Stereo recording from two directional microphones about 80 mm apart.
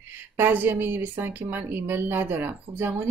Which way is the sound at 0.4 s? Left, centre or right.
Right.